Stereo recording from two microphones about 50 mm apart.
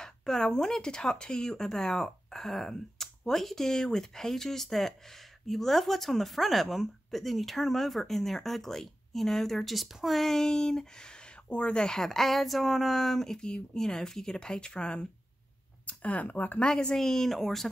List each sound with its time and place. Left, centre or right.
0.0 s speech: centre
15.9 s speech: left
16.6 s speech: centre